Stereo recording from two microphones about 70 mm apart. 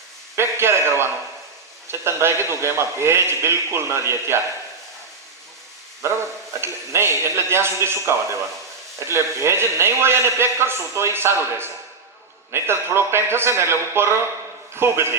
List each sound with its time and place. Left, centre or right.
0.3 s a man's voice: right
6.0 s a man's voice: right